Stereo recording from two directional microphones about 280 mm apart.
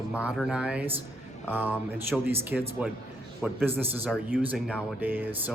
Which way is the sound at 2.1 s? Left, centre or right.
Centre.